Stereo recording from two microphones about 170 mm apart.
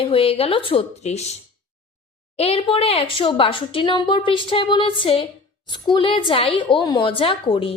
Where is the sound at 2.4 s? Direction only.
35° left (ahead or behind).